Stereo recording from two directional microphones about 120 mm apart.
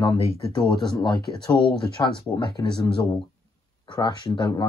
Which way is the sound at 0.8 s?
40° left (ahead or behind).